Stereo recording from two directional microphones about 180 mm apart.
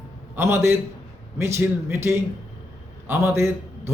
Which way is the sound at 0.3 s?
15° right (ahead or behind).